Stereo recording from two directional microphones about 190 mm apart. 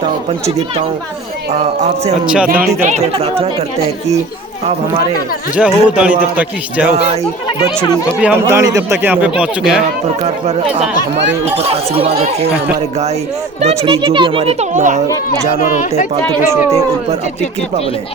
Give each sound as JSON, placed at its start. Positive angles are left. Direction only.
{"t": 2.2, "sound": "speech", "side_deg": -5}
{"t": 2.5, "sound": "a child's voice", "side_deg": -40}
{"t": 5.5, "sound": "speech", "side_deg": -5}
{"t": 10.2, "sound": "a child's voice", "side_deg": -35}
{"t": 12.0, "sound": "a child's voice", "side_deg": -35}
{"t": 13.6, "sound": "a child's voice", "side_deg": -30}
{"t": 15.6, "sound": "speech", "side_deg": 45}
{"t": 16.4, "sound": "speech", "side_deg": -15}